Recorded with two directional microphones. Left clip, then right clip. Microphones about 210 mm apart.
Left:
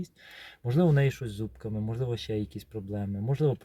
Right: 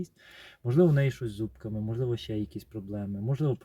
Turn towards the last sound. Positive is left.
turn(degrees=15)  # may be behind; listen again after turning